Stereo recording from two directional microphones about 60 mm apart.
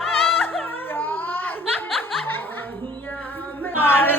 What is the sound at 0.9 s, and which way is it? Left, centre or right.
Baby cry, left.